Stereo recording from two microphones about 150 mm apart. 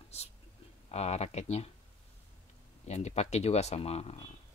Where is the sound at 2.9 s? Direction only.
50° left (ahead or behind).